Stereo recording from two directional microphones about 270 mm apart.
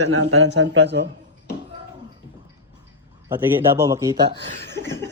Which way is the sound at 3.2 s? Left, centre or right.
Centre.